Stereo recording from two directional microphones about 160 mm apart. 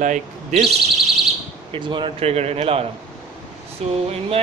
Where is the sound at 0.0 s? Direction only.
50° right (ahead or behind).